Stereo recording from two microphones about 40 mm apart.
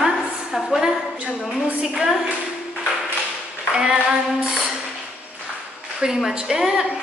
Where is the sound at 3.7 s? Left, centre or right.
Right.